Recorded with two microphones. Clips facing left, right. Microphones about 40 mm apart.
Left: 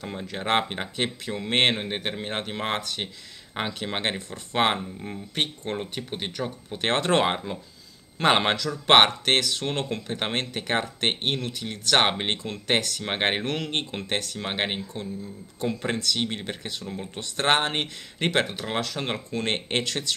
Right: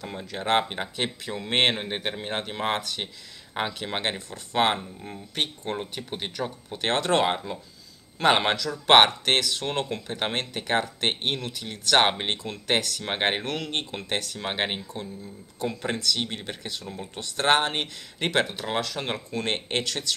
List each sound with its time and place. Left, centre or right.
0.0 s speech: centre